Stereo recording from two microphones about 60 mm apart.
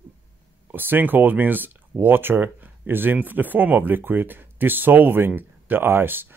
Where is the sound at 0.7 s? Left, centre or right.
Right.